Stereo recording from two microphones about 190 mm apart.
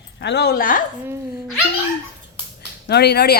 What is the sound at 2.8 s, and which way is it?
Speech, 60° left (ahead or behind).